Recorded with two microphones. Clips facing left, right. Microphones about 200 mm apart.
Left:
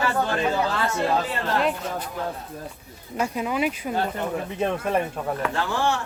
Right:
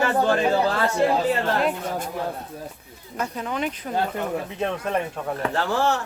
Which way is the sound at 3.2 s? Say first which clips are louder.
Left 3 dB; 10° left (ahead or behind).